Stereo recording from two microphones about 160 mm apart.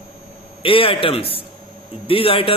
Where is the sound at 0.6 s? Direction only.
35° left (ahead or behind).